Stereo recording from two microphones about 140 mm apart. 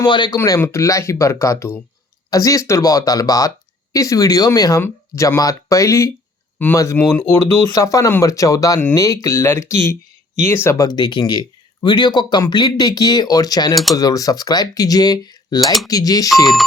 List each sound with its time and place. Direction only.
0.0 s speech: 30° left (ahead or behind)
0.3 s speech: 20° left (ahead or behind)